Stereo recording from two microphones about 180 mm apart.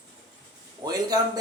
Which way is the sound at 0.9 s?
20° right (ahead or behind).